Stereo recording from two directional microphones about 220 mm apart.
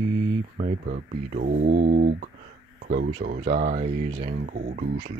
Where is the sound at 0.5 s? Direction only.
35° right (ahead or behind).